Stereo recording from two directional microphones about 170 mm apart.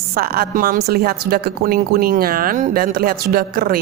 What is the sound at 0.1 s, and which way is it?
A woman's voice, 65° right (ahead or behind).